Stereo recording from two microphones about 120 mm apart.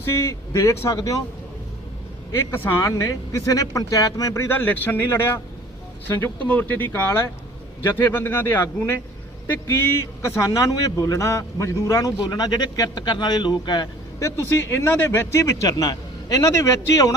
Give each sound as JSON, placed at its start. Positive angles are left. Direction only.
{"t": 0.0, "sound": "speech", "side_deg": 20}
{"t": 2.5, "sound": "speech", "side_deg": 25}
{"t": 4.4, "sound": "speech", "side_deg": 15}
{"t": 14.2, "sound": "speech", "side_deg": 25}